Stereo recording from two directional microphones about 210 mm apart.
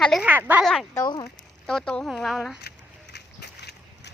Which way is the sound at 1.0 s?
20° left (ahead or behind).